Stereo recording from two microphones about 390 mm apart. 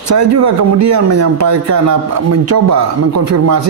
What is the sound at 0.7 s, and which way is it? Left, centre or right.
Speech, right.